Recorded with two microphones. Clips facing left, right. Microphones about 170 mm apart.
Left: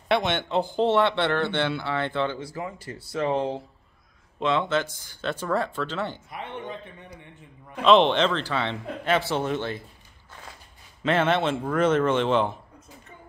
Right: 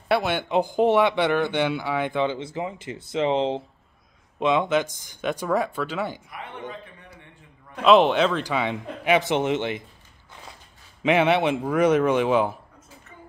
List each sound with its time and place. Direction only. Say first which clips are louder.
0.1 s speech: right 2 dB; 5° right (ahead or behind)
6.3 s a man's voice: left 1 dB; 25° left (ahead or behind)
7.7 s speech: right 1 dB; 5° right (ahead or behind)
11.0 s speech: right 3 dB; 15° right (ahead or behind)